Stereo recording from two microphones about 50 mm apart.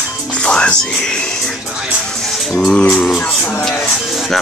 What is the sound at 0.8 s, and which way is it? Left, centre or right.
Speech, centre.